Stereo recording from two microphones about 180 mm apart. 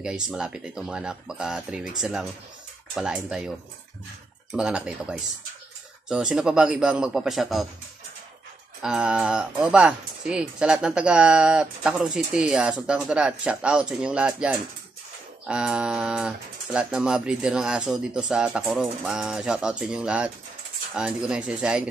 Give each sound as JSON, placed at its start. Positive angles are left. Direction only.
{"t": 0.0, "sound": "speech", "side_deg": -5}
{"t": 8.8, "sound": "speech", "side_deg": -5}